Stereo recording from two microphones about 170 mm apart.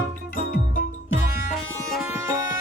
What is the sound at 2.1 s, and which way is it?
Music, 15° right (ahead or behind).